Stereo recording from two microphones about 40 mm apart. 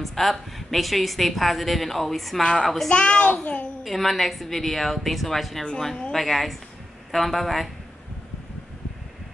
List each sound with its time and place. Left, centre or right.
0.0 s a woman's voice: centre
2.9 s a woman's voice: left
3.8 s a woman's voice: centre